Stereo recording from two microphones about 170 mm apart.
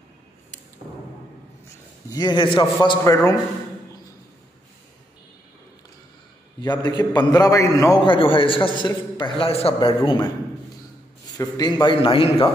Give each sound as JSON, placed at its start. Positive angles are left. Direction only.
{"t": 2.0, "sound": "a man's voice", "side_deg": 25}
{"t": 6.6, "sound": "a man's voice", "side_deg": 25}
{"t": 8.0, "sound": "a man's voice", "side_deg": 30}